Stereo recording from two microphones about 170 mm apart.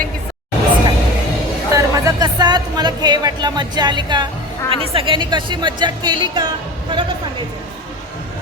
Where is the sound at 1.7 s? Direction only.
20° right (ahead or behind).